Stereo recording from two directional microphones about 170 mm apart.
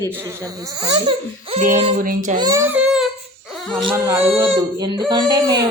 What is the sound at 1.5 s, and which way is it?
Speech, 40° right (ahead or behind).